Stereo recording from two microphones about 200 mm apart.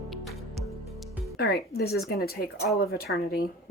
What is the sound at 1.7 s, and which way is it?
Speech, 50° left (ahead or behind).